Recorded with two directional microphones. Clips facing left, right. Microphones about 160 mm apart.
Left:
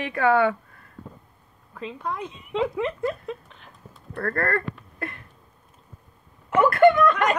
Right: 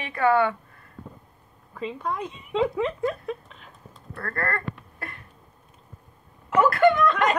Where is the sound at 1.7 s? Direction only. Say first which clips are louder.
Right 2 dB; centre (ahead or behind).